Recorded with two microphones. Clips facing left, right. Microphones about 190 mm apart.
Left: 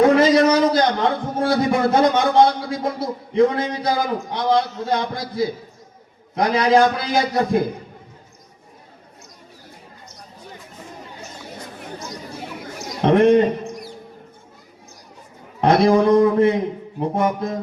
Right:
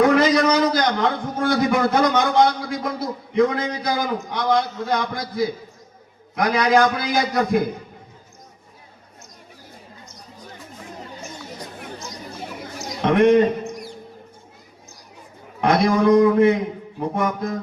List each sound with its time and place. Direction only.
0.0 s a man's voice: 25° left (ahead or behind)
13.0 s a man's voice: 30° left (ahead or behind)
15.6 s a man's voice: 30° left (ahead or behind)